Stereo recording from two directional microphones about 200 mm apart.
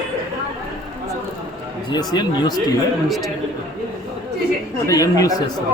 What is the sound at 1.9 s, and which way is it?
Speech, 20° left (ahead or behind).